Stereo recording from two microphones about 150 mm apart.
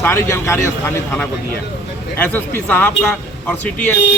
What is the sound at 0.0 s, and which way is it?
A man's voice, 15° left (ahead or behind).